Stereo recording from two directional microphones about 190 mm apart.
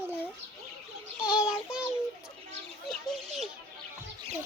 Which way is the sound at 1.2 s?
5° right (ahead or behind).